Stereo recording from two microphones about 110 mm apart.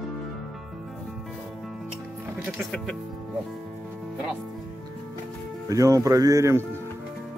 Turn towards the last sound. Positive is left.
turn(degrees=-25)  # may be behind; listen again after turning